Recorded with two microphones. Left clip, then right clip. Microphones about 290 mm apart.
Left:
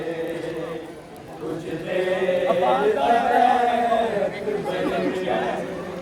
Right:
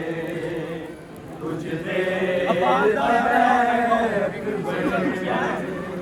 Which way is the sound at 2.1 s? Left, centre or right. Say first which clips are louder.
Left 1 dB; centre.